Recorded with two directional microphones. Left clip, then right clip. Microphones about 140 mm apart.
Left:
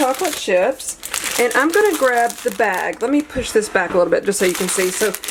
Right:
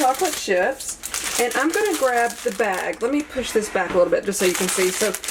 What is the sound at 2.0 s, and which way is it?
Speech, 40° left (ahead or behind).